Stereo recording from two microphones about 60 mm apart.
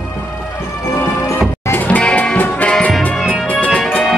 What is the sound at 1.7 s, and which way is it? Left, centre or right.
Music, left.